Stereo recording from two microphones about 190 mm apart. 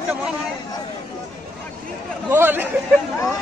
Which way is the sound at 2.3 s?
10° right (ahead or behind).